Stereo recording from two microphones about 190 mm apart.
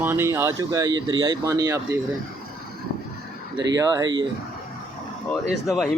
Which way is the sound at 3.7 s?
20° right (ahead or behind).